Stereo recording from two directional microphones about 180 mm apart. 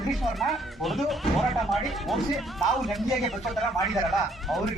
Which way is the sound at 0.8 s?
Centre (ahead or behind).